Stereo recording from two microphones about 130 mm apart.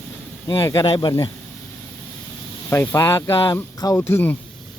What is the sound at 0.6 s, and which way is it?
Speech, 25° left (ahead or behind).